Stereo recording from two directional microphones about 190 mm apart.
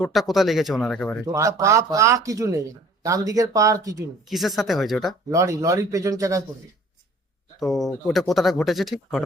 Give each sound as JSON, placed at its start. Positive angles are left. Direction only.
{"t": 0.0, "sound": "speech", "side_deg": 0}
{"t": 1.2, "sound": "speech", "side_deg": -15}
{"t": 4.3, "sound": "speech", "side_deg": 0}
{"t": 5.3, "sound": "speech", "side_deg": -15}
{"t": 7.6, "sound": "speech", "side_deg": 0}